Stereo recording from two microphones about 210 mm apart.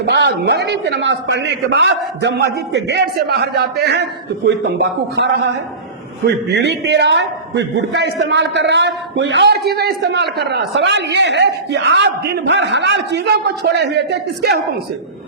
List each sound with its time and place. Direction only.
0.0 s a man's voice: 55° right (ahead or behind)